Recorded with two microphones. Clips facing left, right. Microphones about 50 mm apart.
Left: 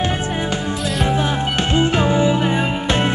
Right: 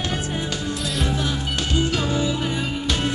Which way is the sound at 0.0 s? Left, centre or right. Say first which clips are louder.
Left 5 dB; left.